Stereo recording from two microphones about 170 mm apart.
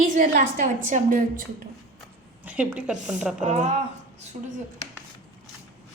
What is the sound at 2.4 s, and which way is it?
A woman's voice, 10° right (ahead or behind).